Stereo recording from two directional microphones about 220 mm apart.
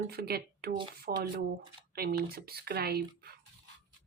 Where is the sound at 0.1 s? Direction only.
45° right (ahead or behind).